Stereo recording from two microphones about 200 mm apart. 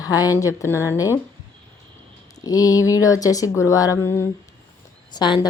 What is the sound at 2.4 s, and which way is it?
Speech, 20° left (ahead or behind).